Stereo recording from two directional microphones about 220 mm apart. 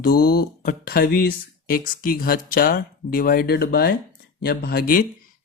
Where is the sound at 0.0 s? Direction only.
45° left (ahead or behind).